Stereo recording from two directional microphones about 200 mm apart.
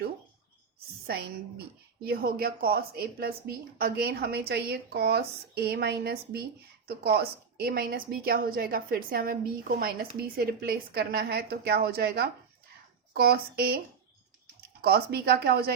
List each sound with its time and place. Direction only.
1.0 s a woman's voice: 50° right (ahead or behind)